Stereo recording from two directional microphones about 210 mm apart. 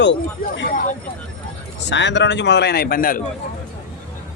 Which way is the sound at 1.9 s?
55° left (ahead or behind).